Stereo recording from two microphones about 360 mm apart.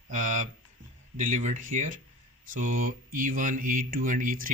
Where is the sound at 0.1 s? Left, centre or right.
Right.